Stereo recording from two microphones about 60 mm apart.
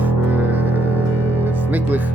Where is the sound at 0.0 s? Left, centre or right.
Right.